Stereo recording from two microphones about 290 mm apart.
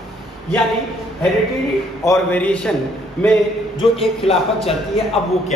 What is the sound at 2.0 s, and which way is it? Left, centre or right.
Speech, centre.